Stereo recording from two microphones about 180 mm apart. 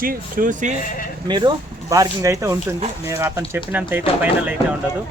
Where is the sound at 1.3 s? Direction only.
25° right (ahead or behind).